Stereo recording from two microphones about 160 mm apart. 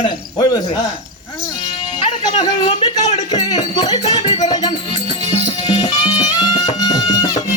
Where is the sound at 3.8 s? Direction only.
45° left (ahead or behind).